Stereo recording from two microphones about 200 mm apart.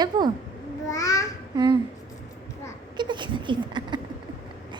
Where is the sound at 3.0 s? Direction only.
20° right (ahead or behind).